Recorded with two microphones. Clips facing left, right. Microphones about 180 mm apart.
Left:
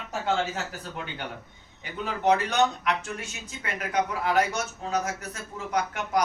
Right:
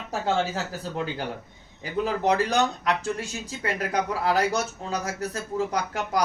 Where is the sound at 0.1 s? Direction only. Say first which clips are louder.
Right 2 dB; 35° right (ahead or behind).